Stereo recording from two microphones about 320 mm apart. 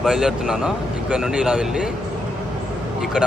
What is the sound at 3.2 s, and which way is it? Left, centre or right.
Speech, centre.